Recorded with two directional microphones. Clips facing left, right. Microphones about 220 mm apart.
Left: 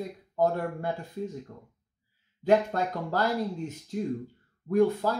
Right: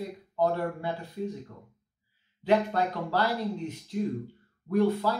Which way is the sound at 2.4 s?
45° left (ahead or behind).